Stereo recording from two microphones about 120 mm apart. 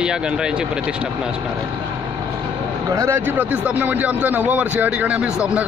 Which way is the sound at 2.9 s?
25° right (ahead or behind).